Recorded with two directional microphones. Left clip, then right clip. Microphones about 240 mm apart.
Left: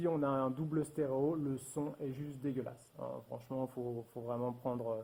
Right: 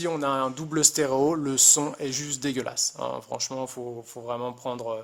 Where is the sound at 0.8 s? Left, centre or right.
Right.